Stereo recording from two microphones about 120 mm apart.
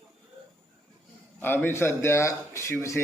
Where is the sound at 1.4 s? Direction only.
15° left (ahead or behind).